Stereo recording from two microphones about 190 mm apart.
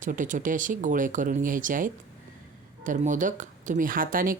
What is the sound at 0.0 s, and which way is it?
Speech, 45° right (ahead or behind).